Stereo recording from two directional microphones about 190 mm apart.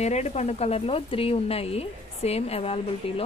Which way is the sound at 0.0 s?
35° left (ahead or behind).